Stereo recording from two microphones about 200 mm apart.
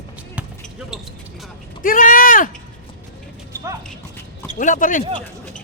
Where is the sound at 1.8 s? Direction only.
45° left (ahead or behind).